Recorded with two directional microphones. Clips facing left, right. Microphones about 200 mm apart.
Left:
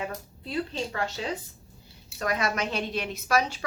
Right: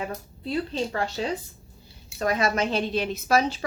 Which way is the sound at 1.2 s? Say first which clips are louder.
Right 5 dB; 40° right (ahead or behind).